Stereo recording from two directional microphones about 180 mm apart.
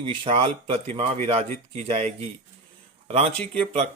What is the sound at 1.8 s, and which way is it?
Speech, 35° right (ahead or behind).